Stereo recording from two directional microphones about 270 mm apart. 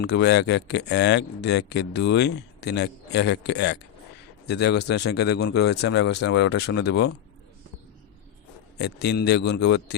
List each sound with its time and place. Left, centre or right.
0.0 s speech: left
8.8 s speech: left